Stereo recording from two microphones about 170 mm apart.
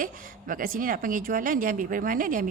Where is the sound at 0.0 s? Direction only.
55° right (ahead or behind).